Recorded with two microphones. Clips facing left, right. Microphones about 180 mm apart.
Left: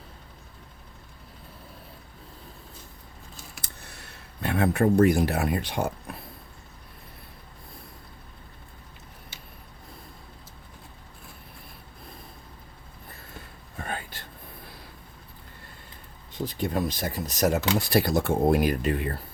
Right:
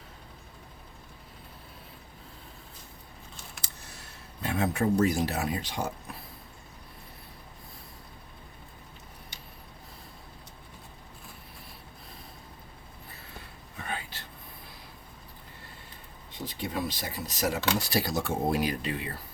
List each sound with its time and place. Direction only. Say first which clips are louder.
3.6 s speech: left 2 dB; 60° left (ahead or behind)
13.7 s a sound: left 3 dB; 45° left (ahead or behind)
16.6 s speech: left 5 dB; 45° left (ahead or behind)